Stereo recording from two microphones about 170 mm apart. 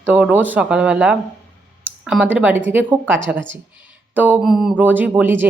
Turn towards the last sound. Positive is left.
turn(degrees=-10)  # may be behind; listen again after turning